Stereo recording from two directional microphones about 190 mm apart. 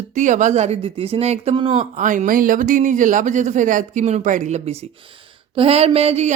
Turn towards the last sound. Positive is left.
turn(degrees=-35)  # may be behind; listen again after turning